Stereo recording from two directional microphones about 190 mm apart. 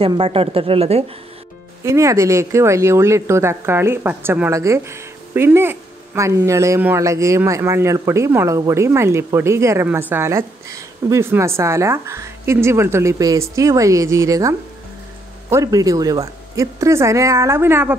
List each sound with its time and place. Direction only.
0.0 s a woman's voice: 30° right (ahead or behind)
1.9 s speech: 15° right (ahead or behind)
15.5 s speech: 20° right (ahead or behind)